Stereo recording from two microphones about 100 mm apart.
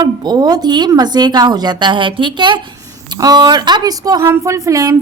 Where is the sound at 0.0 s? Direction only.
45° right (ahead or behind).